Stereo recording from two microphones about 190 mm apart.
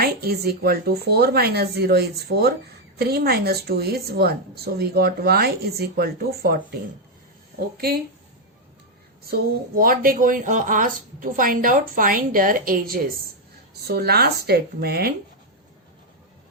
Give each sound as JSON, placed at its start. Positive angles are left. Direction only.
{"t": 0.0, "sound": "speech", "side_deg": -55}
{"t": 7.8, "sound": "speech", "side_deg": -55}
{"t": 9.2, "sound": "a woman's voice", "side_deg": -50}